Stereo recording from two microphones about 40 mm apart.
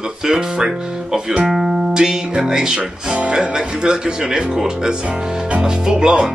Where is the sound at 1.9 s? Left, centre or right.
Centre.